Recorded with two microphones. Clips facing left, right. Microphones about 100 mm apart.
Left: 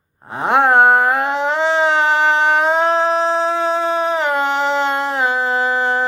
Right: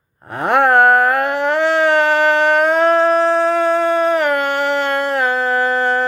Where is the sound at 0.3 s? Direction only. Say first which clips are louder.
Even; 20° left (ahead or behind).